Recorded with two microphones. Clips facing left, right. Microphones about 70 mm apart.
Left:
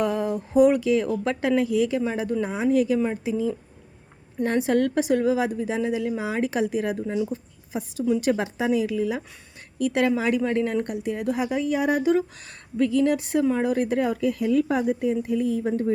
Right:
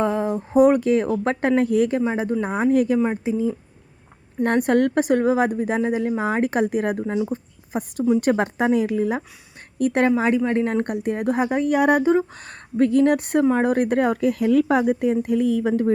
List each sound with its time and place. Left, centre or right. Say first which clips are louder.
0.0 s a sound: right 3 dB; right
0.5 s speech: right 2 dB; right
2.0 s speech: right 3 dB; right
2.5 s speech: right 3 dB; right
3.0 s speech: right 3 dB; right
4.4 s speech: right 3 dB; right
12.0 s speech: right 3 dB; right